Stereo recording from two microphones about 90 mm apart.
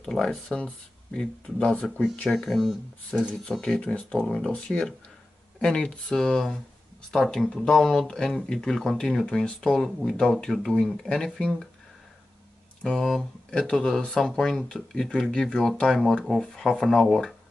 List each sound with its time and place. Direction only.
0.0 s speech: 5° left (ahead or behind)
2.2 s speech: centre (ahead or behind)
3.1 s speech: 15° left (ahead or behind)
12.8 s speech: centre (ahead or behind)